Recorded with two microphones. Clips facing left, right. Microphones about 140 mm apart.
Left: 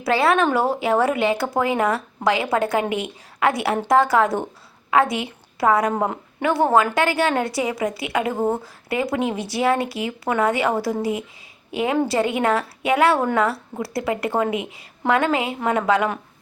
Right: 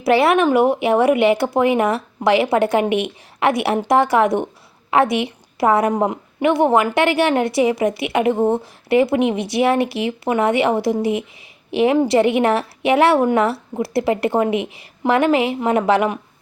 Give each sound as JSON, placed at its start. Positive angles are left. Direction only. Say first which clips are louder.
{"t": 0.0, "sound": "a woman's voice", "louder": "right 4 dB", "side_deg": -25}